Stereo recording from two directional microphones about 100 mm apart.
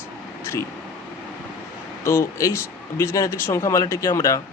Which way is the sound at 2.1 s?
30° left (ahead or behind).